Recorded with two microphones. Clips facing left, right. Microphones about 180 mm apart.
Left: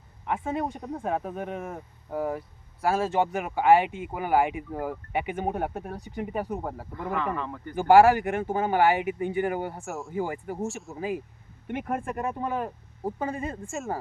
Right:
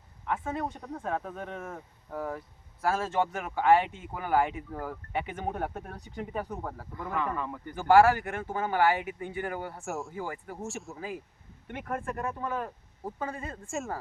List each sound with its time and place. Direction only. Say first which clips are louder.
0.3 s speech: left 3 dB; 15° left (ahead or behind)
6.6 s speech: left 4 dB; 20° left (ahead or behind)
7.3 s speech: left 2 dB; 10° right (ahead or behind)
7.8 s speech: left 3 dB; 15° left (ahead or behind)
9.8 s speech: even; centre (ahead or behind)
10.1 s speech: left 7 dB; 15° left (ahead or behind)
10.7 s speech: left 2 dB; centre (ahead or behind)
10.9 s speech: left 7 dB; 15° left (ahead or behind)